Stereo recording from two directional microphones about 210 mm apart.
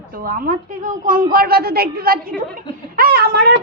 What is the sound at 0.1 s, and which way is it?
Speech, 45° right (ahead or behind).